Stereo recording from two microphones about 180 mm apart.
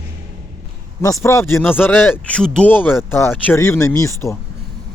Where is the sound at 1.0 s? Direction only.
15° left (ahead or behind).